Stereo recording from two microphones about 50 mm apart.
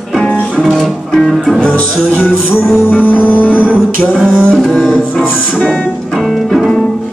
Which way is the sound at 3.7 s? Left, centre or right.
Right.